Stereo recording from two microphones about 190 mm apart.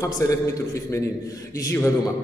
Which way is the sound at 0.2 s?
15° left (ahead or behind).